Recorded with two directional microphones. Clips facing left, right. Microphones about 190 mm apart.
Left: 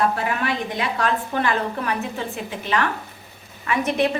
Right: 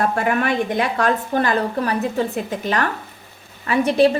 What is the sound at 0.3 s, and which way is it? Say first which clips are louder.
A woman's voice: right 5 dB; 50° right (ahead or behind).